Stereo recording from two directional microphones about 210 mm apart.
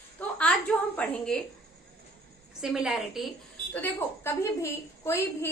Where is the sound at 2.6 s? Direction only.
5° right (ahead or behind).